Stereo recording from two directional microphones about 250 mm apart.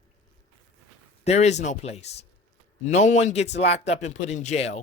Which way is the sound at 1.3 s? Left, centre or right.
Left.